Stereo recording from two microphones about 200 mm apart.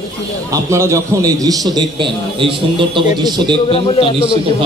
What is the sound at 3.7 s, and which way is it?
Speech, 30° left (ahead or behind).